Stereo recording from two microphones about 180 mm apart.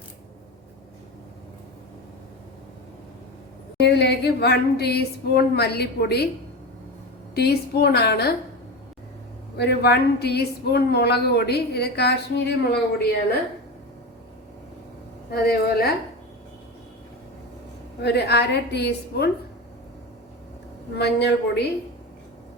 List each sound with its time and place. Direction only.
3.8 s a woman's voice: 70° left (ahead or behind)
7.3 s a woman's voice: 65° left (ahead or behind)
9.6 s a woman's voice: 65° left (ahead or behind)
15.3 s a woman's voice: 60° left (ahead or behind)
18.0 s a woman's voice: 65° left (ahead or behind)
20.9 s a woman's voice: 65° left (ahead or behind)